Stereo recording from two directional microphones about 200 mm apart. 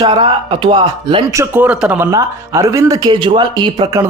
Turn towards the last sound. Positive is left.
turn(degrees=-20)  # may be behind; listen again after turning